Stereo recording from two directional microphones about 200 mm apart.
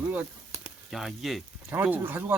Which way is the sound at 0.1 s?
10° right (ahead or behind).